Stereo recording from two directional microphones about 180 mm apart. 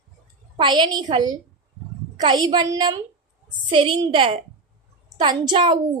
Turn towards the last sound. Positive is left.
turn(degrees=-25)  # may be behind; listen again after turning